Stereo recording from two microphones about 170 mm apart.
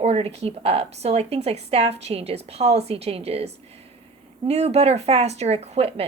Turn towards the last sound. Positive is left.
turn(degrees=-35)  # may be behind; listen again after turning